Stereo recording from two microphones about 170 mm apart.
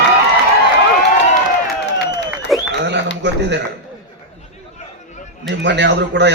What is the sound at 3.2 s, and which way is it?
Speech, 90° right.